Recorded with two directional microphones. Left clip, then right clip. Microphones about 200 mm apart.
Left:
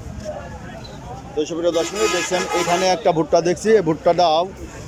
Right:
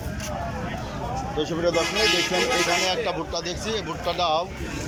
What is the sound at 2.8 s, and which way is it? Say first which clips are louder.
Speech: left 7 dB; 30° left (ahead or behind).